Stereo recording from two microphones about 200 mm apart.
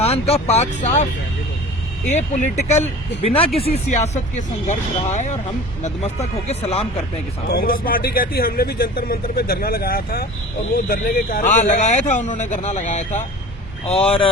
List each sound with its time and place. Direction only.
0.0 s speech: 30° left (ahead or behind)
2.0 s speech: 40° left (ahead or behind)
7.4 s speech: 45° left (ahead or behind); by 14.3 s 30° left (ahead or behind)